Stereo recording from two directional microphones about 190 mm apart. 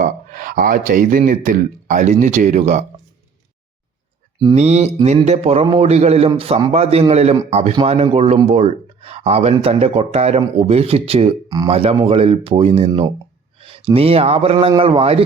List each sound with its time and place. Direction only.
0.0 s speech: 45° right (ahead or behind)
4.5 s speech: 35° right (ahead or behind)
11.4 s speech: 20° right (ahead or behind)
11.7 s speech: 30° right (ahead or behind)